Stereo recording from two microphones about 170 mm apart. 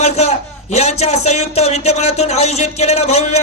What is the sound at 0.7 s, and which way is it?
Speech, 40° left (ahead or behind).